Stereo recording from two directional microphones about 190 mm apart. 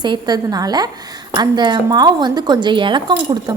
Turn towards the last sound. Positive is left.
turn(degrees=-25)  # may be behind; listen again after turning